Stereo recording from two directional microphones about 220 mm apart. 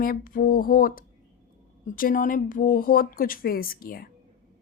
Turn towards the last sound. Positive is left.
turn(degrees=40)  # may be behind; listen again after turning